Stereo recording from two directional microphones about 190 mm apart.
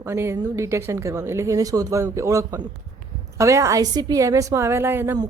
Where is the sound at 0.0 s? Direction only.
15° right (ahead or behind).